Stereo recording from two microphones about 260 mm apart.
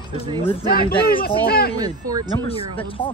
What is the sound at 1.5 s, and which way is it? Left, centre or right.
Speech, left.